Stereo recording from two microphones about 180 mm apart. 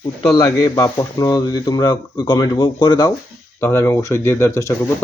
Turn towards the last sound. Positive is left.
turn(degrees=15)  # may be behind; listen again after turning